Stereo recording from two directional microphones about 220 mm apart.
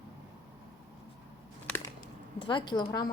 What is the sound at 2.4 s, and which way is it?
Speech, 20° left (ahead or behind).